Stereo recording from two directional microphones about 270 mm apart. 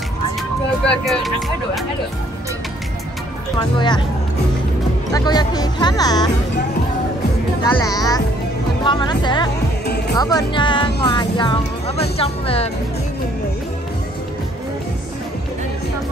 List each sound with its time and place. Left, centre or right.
0.8 s speech: centre
3.5 s speech: centre
5.1 s speech: centre
7.8 s speech: centre
9.8 s music: left
10.1 s speech: centre